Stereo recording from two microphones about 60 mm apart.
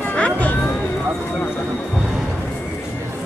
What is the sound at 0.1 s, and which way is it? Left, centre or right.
Vehicle, left.